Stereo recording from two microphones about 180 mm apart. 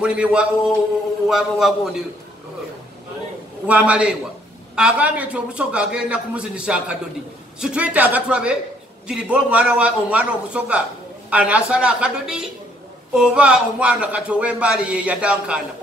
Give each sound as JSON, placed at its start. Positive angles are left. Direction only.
{"t": 0.0, "sound": "a man's voice", "side_deg": -5}
{"t": 3.6, "sound": "a man's voice", "side_deg": -5}